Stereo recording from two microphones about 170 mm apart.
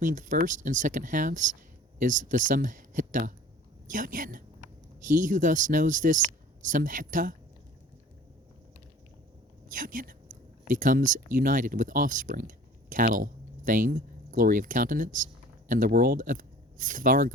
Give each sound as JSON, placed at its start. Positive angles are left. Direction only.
{"t": 0.0, "sound": "speech", "side_deg": -50}
{"t": 9.7, "sound": "speech", "side_deg": -55}